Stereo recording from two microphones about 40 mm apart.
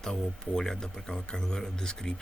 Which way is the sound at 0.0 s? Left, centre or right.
Centre.